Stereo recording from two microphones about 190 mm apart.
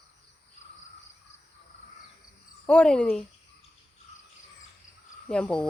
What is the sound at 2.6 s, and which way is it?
Speech, 5° left (ahead or behind).